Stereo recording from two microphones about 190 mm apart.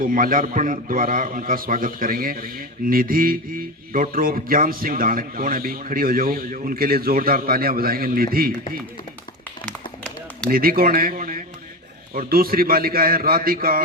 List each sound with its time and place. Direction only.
0.0 s a man's voice: 45° right (ahead or behind)
9.6 s run: 5° left (ahead or behind)
10.5 s a man's voice: 50° right (ahead or behind)